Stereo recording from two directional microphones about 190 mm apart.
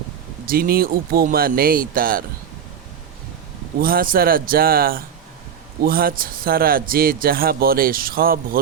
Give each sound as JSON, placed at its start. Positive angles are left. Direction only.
{"t": 0.4, "sound": "a man's voice", "side_deg": -50}
{"t": 3.8, "sound": "a man's voice", "side_deg": -50}